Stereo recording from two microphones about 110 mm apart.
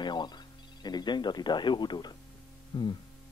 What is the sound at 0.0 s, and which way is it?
Telephone, 45° left (ahead or behind).